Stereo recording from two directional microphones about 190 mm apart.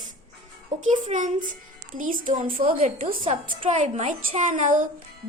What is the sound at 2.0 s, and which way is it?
Music, 45° right (ahead or behind).